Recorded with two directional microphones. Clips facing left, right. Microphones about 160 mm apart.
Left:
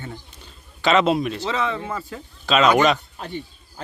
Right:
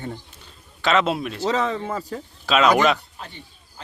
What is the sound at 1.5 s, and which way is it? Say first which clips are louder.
Speech: right 2 dB; 40° right (ahead or behind).